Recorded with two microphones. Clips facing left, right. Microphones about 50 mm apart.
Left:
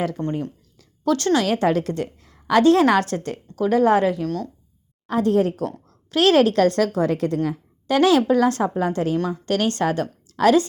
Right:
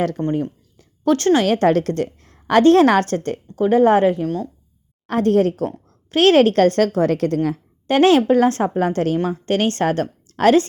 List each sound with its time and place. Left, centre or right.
0.2 s a woman's voice: right
1.5 s a woman's voice: right
3.5 s a woman's voice: right
4.3 s speech: right
5.0 s a woman's voice: right
5.6 s a woman's voice: right
7.3 s a woman's voice: right
9.1 s a woman's voice: right